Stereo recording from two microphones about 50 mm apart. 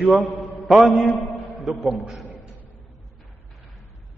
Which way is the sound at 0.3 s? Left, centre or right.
Left.